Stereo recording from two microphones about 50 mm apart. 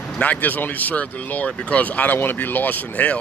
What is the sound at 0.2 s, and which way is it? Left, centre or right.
A man's voice, left.